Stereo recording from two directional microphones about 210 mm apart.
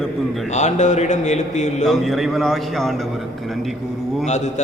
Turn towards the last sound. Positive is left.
turn(degrees=35)  # may be behind; listen again after turning